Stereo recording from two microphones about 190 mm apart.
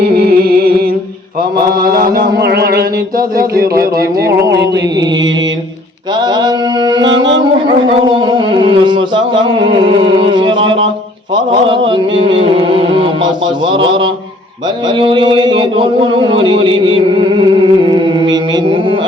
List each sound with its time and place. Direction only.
0.0 s music: 55° right (ahead or behind)
1.8 s mantra: 50° right (ahead or behind)
6.2 s music: 20° right (ahead or behind)
11.7 s speech: 25° right (ahead or behind)